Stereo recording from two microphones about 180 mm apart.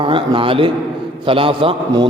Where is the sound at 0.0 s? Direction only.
30° right (ahead or behind).